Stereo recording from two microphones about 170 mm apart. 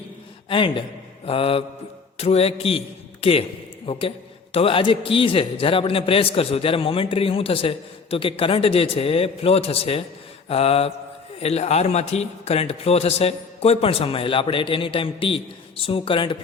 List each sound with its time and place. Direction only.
0.4 s a man's voice: 30° left (ahead or behind)